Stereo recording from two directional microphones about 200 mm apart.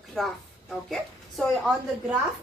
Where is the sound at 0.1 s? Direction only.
Centre (ahead or behind).